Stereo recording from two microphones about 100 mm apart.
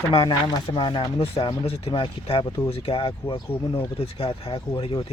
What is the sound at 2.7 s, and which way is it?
Speech, 75° left (ahead or behind).